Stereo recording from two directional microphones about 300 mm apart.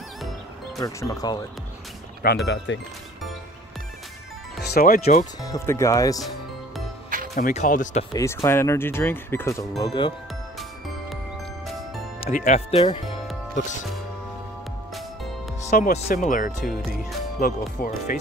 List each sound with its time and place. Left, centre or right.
0.7 s speech: centre
2.4 s speech: left
4.6 s speech: left
5.4 s speech: centre
7.3 s speech: left
8.1 s speech: centre
12.2 s speech: left
15.8 s speech: left